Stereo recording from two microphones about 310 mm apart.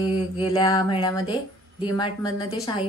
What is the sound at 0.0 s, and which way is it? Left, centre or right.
Mantra, centre.